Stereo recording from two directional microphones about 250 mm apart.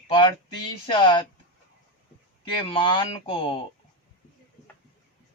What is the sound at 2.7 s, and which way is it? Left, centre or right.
Speech, centre.